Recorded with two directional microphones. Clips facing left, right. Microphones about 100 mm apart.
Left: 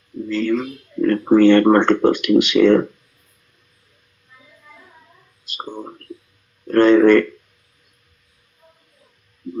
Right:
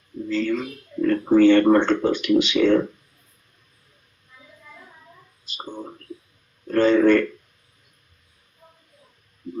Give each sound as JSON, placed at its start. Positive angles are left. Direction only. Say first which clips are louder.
{"t": 0.3, "sound": "speech", "louder": "left 3 dB", "side_deg": 65}
{"t": 6.7, "sound": "speech", "louder": "left 5 dB", "side_deg": 65}